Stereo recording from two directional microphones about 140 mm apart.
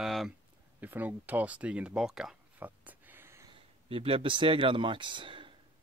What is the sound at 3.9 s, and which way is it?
Speech, 40° right (ahead or behind).